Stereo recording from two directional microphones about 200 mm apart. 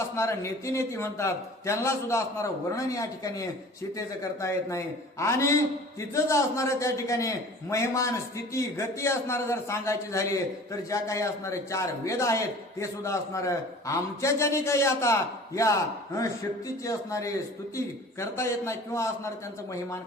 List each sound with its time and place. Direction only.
0.0 s a man's voice: 15° left (ahead or behind)